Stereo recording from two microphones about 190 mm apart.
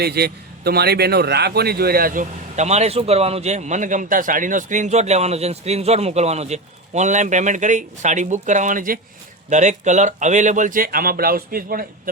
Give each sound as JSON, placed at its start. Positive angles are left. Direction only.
{"t": 0.0, "sound": "a man's voice", "side_deg": -55}